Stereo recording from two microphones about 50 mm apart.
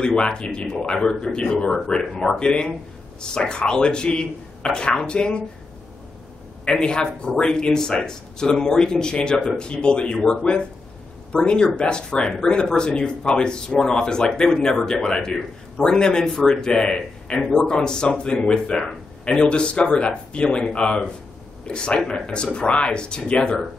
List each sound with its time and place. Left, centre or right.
0.0 s speech: centre
6.6 s speech: centre